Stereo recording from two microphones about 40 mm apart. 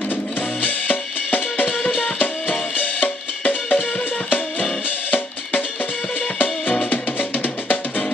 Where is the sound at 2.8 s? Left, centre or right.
Left.